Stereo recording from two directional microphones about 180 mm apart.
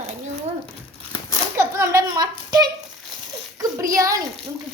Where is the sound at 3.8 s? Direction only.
20° right (ahead or behind).